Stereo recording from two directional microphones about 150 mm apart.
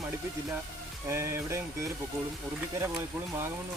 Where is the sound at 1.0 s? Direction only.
15° right (ahead or behind).